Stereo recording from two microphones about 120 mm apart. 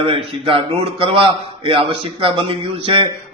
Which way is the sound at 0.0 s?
50° right (ahead or behind).